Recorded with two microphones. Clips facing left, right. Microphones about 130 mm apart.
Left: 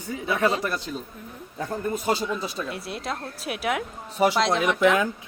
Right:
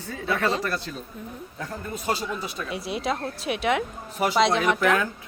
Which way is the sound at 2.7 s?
Centre (ahead or behind).